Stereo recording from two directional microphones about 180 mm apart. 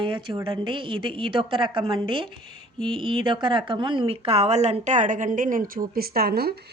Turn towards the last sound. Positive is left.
turn(degrees=-60)  # may be behind; listen again after turning